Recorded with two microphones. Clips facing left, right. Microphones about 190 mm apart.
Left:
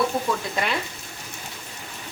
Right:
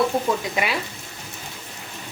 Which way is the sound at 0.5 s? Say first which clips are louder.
Right 1 dB; 10° right (ahead or behind).